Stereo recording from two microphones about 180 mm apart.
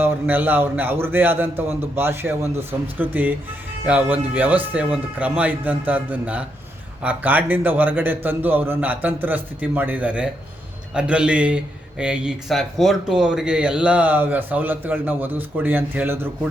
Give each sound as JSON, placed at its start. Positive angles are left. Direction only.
{"t": 0.0, "sound": "a man's voice", "side_deg": -10}